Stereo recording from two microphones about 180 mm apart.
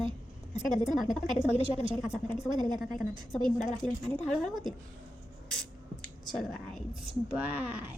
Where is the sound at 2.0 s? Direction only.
5° right (ahead or behind).